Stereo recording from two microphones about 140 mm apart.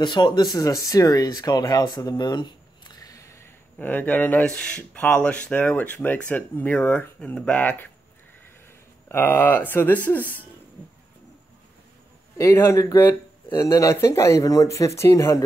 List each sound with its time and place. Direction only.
0.0 s speech: 30° left (ahead or behind); by 7.9 s 15° left (ahead or behind)
9.1 s speech: 15° left (ahead or behind)
12.4 s speech: 20° left (ahead or behind)